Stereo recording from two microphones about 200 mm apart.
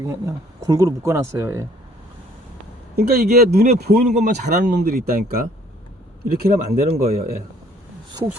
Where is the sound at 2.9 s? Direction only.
50° right (ahead or behind).